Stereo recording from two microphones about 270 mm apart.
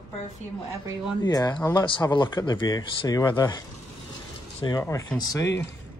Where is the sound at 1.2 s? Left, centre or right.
Centre.